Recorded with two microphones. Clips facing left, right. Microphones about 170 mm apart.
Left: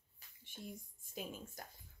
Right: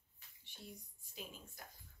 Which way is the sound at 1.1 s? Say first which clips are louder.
Left 6 dB; 45° left (ahead or behind).